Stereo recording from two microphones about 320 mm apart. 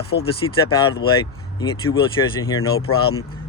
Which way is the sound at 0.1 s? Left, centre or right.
Left.